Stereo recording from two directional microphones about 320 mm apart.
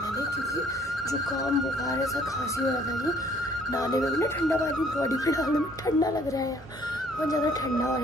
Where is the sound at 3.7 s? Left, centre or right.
Centre.